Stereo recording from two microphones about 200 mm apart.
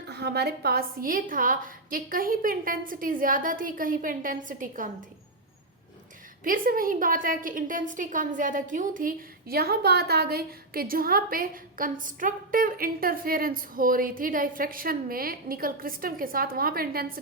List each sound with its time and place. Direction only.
0.1 s a woman's voice: 55° right (ahead or behind)
6.4 s a woman's voice: 45° right (ahead or behind)